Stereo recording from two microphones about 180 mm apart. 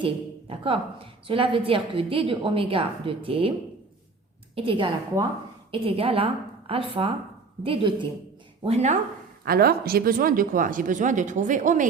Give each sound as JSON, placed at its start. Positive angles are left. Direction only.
{"t": 0.0, "sound": "a woman's voice", "side_deg": -30}
{"t": 4.5, "sound": "a woman's voice", "side_deg": -30}
{"t": 9.4, "sound": "speech", "side_deg": -60}